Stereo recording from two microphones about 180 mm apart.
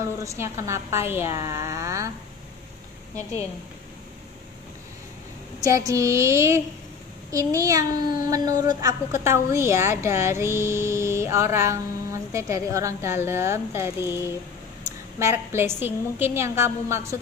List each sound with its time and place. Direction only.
0.2 s a woman's voice: 15° right (ahead or behind)
5.6 s a woman's voice: 20° right (ahead or behind)